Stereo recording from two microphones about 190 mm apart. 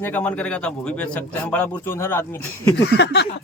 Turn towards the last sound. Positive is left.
turn(degrees=65)  # may be behind; listen again after turning